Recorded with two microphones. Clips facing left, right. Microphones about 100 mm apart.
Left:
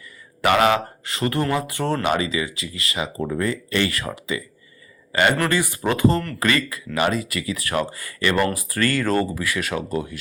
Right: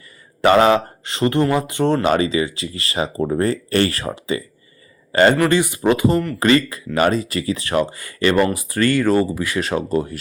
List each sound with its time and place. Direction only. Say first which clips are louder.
0.4 s speech: right 4 dB; 30° right (ahead or behind)
2.0 s speech: right 5 dB; 35° right (ahead or behind)
4.0 s speech: right 4 dB; 30° right (ahead or behind)
5.5 s speech: right 6 dB; 20° right (ahead or behind)
6.4 s speech: right 6 dB; 25° right (ahead or behind)